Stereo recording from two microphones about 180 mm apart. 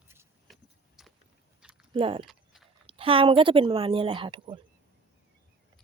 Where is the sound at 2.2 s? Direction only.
Centre (ahead or behind).